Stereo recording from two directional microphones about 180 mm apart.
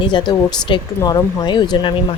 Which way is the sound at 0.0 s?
25° left (ahead or behind).